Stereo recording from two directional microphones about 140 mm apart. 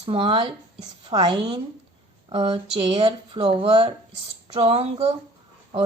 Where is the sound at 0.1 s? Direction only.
40° right (ahead or behind).